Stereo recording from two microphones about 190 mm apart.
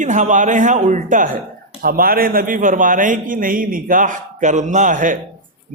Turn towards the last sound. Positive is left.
turn(degrees=-45)  # may be behind; listen again after turning